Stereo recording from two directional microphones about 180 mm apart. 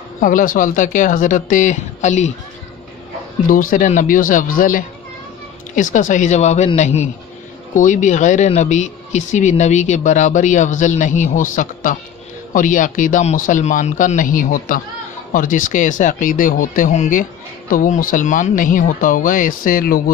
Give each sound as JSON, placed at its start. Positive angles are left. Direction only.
{"t": 0.2, "sound": "speech", "side_deg": 50}
{"t": 3.4, "sound": "speech", "side_deg": 50}